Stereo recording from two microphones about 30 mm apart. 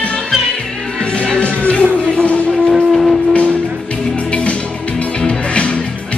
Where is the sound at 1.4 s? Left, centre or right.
Left.